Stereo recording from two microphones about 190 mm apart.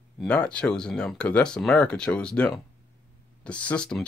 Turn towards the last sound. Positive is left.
turn(degrees=5)  # may be behind; listen again after turning